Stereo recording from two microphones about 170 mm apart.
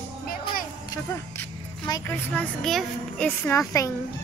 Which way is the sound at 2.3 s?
5° left (ahead or behind).